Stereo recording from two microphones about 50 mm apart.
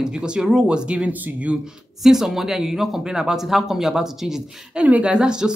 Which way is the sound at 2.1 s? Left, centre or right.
Centre.